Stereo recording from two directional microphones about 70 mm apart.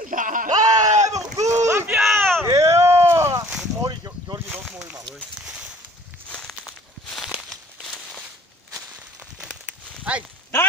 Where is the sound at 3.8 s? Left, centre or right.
Right.